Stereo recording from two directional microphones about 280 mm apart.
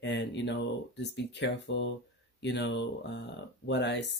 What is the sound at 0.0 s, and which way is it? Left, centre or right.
Speech, left.